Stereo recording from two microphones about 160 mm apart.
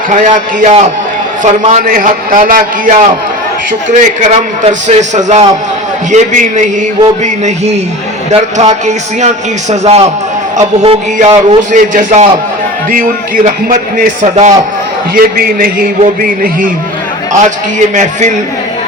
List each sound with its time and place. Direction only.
0.1 s a man's voice: 50° right (ahead or behind)
1.9 s a man's voice: 60° right (ahead or behind)
3.9 s a man's voice: 45° right (ahead or behind)
8.3 s a man's voice: 45° right (ahead or behind)
14.2 s a man's voice: 45° right (ahead or behind)
15.1 s a man's voice: 65° right (ahead or behind)
17.9 s a man's voice: 50° right (ahead or behind)